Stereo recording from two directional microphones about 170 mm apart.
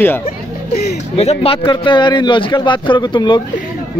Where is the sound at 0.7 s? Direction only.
70° left (ahead or behind).